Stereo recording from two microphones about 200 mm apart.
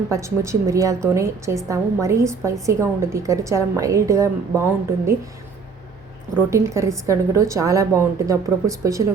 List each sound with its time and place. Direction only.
0.1 s a woman's voice: 15° right (ahead or behind)
6.3 s a woman's voice: 15° right (ahead or behind)